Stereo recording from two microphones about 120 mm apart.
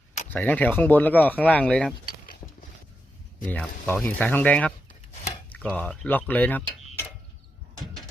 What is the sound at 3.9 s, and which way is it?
Speech, 15° left (ahead or behind).